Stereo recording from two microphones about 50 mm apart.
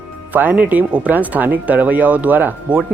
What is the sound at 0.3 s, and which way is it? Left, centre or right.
Speech, right.